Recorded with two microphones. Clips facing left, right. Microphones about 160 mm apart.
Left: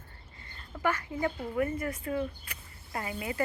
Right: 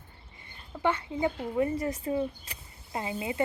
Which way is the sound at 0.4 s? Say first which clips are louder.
Right 2 dB; 20° right (ahead or behind).